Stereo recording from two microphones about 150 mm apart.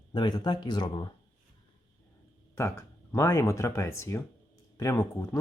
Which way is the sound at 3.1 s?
20° left (ahead or behind).